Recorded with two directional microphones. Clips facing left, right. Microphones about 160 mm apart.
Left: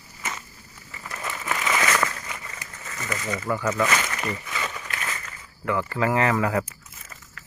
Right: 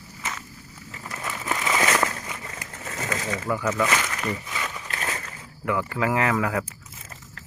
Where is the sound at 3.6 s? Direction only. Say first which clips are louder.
Even; 5° left (ahead or behind).